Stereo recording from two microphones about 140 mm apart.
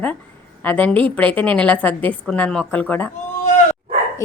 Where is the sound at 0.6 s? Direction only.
10° left (ahead or behind).